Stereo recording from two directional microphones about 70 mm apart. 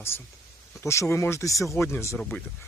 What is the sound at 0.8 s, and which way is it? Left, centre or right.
Speech, left.